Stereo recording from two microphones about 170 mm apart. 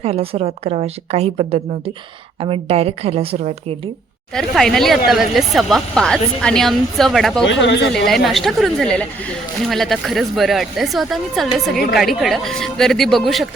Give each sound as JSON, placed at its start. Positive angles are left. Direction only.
{"t": 0.0, "sound": "a woman's voice", "side_deg": -35}
{"t": 4.4, "sound": "speech", "side_deg": 0}
{"t": 7.4, "sound": "speech", "side_deg": 90}
{"t": 7.9, "sound": "speech", "side_deg": 0}